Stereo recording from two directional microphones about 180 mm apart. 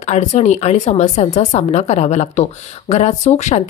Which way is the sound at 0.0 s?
40° left (ahead or behind).